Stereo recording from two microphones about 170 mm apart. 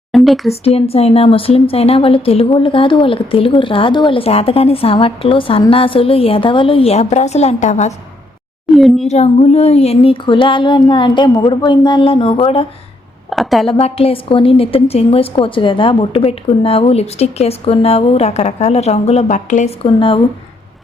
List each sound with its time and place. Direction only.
0.1 s a sound: centre (ahead or behind)
0.6 s speech: 35° left (ahead or behind)
8.7 s a woman's voice: centre (ahead or behind)
9.0 s speech: 40° left (ahead or behind)
13.3 s a woman's voice: centre (ahead or behind)
13.7 s speech: 35° left (ahead or behind)